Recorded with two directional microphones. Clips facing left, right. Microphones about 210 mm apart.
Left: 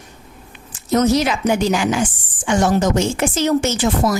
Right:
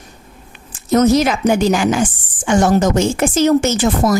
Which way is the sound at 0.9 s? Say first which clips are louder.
Right 3 dB; 50° right (ahead or behind).